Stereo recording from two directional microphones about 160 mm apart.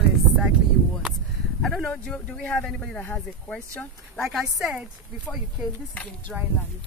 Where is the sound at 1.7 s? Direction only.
5° left (ahead or behind).